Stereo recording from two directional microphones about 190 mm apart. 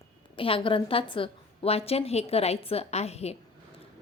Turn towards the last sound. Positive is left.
turn(degrees=35)  # may be behind; listen again after turning